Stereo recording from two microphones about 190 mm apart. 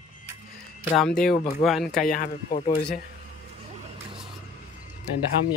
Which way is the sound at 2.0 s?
45° left (ahead or behind).